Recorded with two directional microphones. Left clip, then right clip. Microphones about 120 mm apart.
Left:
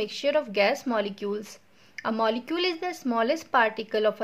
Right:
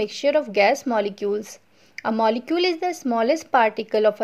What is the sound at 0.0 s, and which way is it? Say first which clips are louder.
Speech: right 5 dB; 35° right (ahead or behind).